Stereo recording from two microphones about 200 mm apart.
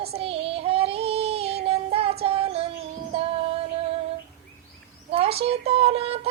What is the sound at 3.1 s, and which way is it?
Music, 30° right (ahead or behind).